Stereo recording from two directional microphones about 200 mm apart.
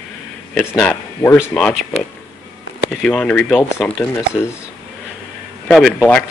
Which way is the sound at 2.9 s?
5° left (ahead or behind).